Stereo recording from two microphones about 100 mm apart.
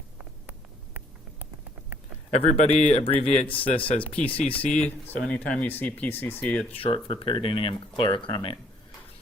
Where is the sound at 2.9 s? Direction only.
85° left.